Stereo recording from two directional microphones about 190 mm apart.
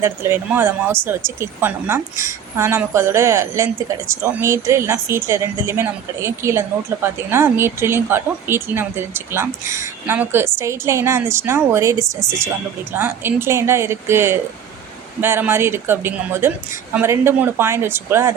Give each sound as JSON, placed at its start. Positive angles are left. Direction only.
{"t": 0.0, "sound": "speech", "side_deg": -10}